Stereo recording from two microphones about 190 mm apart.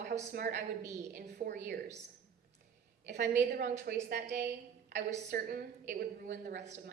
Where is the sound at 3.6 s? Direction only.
40° right (ahead or behind).